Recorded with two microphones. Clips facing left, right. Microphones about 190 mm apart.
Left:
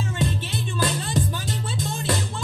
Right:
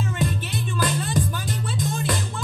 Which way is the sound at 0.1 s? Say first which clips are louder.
Even; 25° left (ahead or behind).